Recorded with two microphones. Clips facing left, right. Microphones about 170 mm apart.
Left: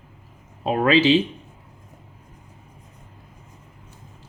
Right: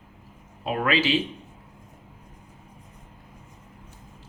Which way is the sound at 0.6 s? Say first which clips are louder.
Left 7 dB; 30° left (ahead or behind).